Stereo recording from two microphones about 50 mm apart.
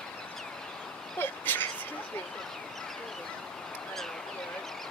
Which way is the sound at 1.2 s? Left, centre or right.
Left.